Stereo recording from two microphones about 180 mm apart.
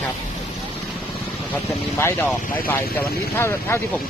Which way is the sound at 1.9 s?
10° left (ahead or behind).